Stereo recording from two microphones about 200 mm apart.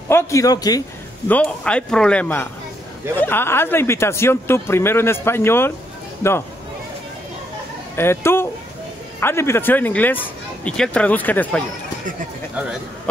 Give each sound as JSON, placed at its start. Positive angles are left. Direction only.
{"t": 0.1, "sound": "speech", "side_deg": 15}
{"t": 1.3, "sound": "a man's voice", "side_deg": 5}
{"t": 7.9, "sound": "speech", "side_deg": 10}